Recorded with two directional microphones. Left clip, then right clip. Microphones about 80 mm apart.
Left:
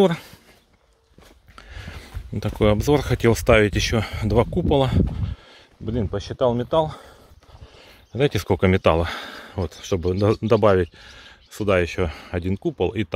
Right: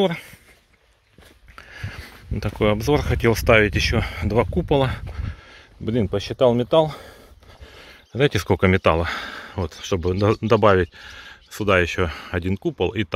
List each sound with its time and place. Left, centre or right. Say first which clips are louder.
1.5 s a sound: right 3 dB; left
2.6 s speech: left 1 dB; left
3.3 s speech: right 1 dB; left
4.6 s speech: even; left
5.1 s a sound: left 1 dB; left
5.9 s speech: right 4 dB; right
8.1 s speech: right 1 dB; centre
8.8 s speech: even; left; by 12.6 s centre
12.6 s speech: even; centre